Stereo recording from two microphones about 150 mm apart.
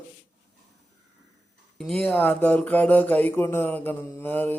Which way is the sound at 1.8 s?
5° left (ahead or behind).